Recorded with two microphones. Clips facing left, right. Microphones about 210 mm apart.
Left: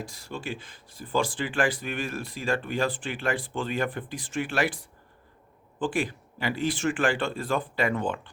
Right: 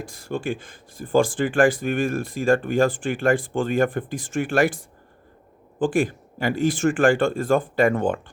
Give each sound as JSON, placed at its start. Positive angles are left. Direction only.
{"t": 0.0, "sound": "speech", "side_deg": -50}